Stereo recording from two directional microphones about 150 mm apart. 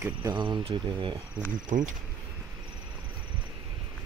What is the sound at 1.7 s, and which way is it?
Insect, 60° right (ahead or behind).